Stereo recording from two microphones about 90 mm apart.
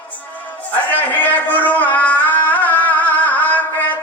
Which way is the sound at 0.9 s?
20° left (ahead or behind).